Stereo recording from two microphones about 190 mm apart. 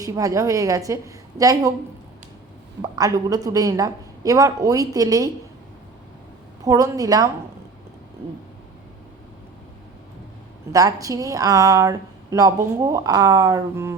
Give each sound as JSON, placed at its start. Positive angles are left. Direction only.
{"t": 0.0, "sound": "a woman's voice", "side_deg": -20}
{"t": 2.8, "sound": "a woman's voice", "side_deg": -20}
{"t": 6.7, "sound": "a woman's voice", "side_deg": -20}
{"t": 10.7, "sound": "a woman's voice", "side_deg": -20}